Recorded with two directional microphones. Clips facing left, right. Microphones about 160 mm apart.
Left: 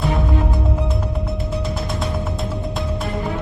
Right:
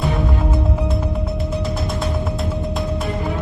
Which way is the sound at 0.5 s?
Centre (ahead or behind).